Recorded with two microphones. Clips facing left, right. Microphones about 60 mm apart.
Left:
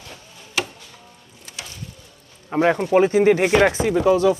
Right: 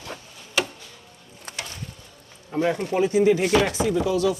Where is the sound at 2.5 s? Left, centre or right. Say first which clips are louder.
Left 5 dB; left.